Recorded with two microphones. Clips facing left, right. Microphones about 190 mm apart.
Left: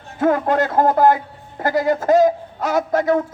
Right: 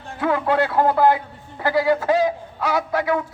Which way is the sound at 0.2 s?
45° left (ahead or behind).